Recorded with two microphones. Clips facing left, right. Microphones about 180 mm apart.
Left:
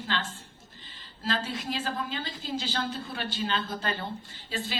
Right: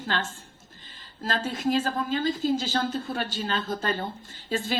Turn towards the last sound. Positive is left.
turn(degrees=-45)  # may be behind; listen again after turning